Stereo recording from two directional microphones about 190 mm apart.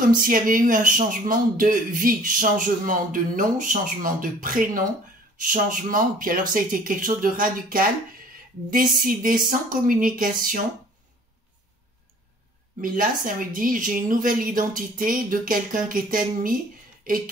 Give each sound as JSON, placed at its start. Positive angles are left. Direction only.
{"t": 0.0, "sound": "speech", "side_deg": -45}
{"t": 12.8, "sound": "speech", "side_deg": -45}